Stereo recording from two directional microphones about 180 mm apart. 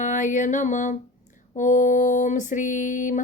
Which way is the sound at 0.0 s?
45° left (ahead or behind).